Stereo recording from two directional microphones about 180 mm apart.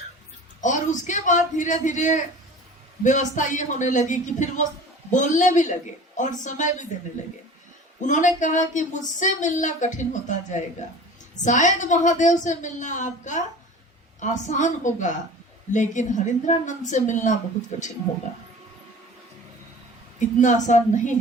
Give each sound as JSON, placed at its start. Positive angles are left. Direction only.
{"t": 0.6, "sound": "speech", "side_deg": 45}
{"t": 8.0, "sound": "speech", "side_deg": 45}
{"t": 20.1, "sound": "speech", "side_deg": 45}